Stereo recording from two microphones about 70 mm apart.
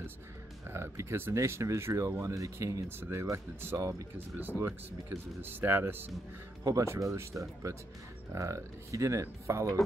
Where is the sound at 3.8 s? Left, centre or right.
Right.